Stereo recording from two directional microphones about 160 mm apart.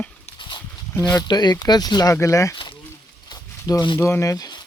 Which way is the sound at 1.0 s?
25° left (ahead or behind).